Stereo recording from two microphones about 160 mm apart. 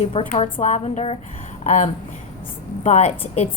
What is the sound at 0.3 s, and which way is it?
Speech, 35° left (ahead or behind).